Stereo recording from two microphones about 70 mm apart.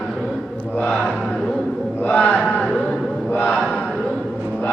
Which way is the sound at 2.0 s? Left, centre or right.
Left.